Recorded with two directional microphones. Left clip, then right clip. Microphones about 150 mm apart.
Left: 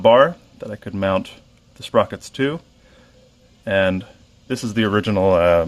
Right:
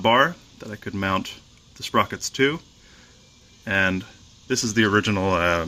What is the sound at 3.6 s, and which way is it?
Speech, 25° left (ahead or behind).